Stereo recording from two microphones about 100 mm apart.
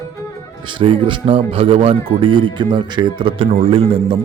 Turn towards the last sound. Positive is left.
turn(degrees=-65)  # may be behind; listen again after turning